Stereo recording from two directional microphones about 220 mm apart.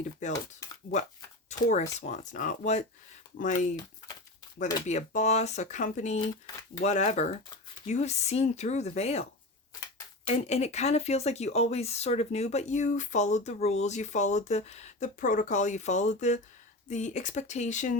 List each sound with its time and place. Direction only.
0.2 s speech: 35° left (ahead or behind)
1.5 s speech: 35° left (ahead or behind)
10.2 s speech: 30° left (ahead or behind)